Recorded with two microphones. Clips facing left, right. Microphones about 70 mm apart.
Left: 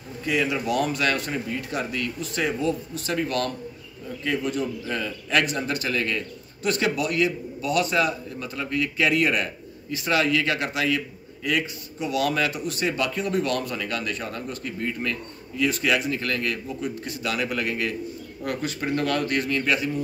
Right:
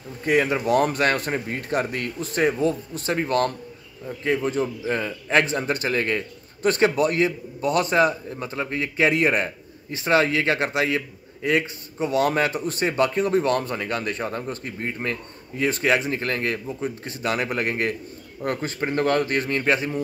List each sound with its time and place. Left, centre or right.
0.2 s a man's voice: right